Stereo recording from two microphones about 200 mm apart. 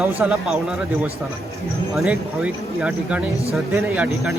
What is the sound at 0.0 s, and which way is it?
Speech, 10° right (ahead or behind).